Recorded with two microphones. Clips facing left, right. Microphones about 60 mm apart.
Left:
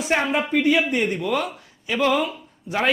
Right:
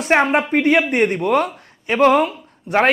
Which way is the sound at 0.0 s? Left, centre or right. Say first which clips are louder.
Right 6 dB; right.